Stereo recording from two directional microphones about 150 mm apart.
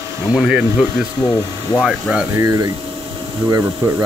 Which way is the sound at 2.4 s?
25° right (ahead or behind).